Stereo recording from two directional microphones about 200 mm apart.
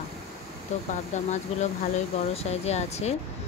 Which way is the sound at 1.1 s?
35° left (ahead or behind).